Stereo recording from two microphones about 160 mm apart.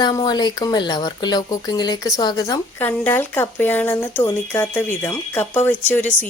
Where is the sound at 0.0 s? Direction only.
25° left (ahead or behind).